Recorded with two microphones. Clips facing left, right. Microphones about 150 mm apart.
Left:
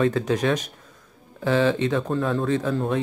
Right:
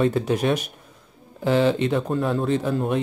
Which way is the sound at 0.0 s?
15° right (ahead or behind).